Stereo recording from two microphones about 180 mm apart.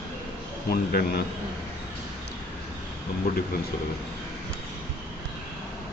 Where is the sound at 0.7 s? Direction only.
60° left (ahead or behind).